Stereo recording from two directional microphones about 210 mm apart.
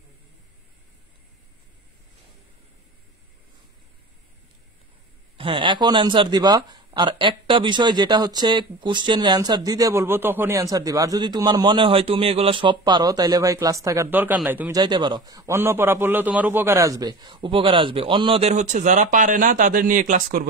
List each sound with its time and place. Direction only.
5.4 s speech: 25° right (ahead or behind); by 14.8 s 10° right (ahead or behind)
14.8 s speech: 20° right (ahead or behind); by 20.4 s 40° right (ahead or behind)